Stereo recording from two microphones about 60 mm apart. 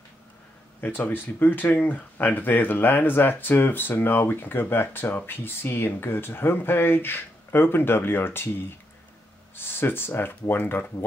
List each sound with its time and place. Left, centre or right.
0.7 s speech: left